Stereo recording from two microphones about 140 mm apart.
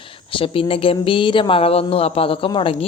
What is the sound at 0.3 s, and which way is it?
Speech, 40° left (ahead or behind).